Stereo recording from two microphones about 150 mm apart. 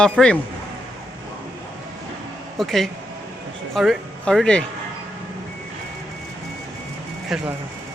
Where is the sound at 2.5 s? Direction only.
Centre (ahead or behind).